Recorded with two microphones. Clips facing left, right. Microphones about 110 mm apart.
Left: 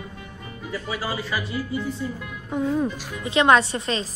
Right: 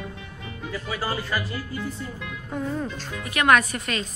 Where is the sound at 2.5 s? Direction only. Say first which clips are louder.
Left 6 dB; 20° left (ahead or behind).